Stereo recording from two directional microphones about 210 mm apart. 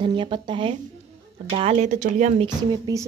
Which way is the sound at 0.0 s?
25° right (ahead or behind).